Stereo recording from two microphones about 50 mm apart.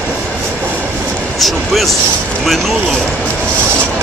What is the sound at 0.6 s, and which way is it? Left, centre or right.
Train, right.